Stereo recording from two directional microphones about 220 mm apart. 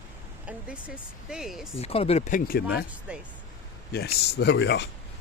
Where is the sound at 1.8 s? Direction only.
25° left (ahead or behind); by 2.8 s 45° left (ahead or behind).